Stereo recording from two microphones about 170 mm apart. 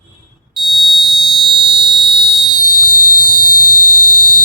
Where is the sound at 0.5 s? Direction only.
Centre (ahead or behind).